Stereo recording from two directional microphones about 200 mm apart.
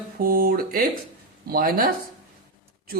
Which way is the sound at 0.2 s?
45° right (ahead or behind).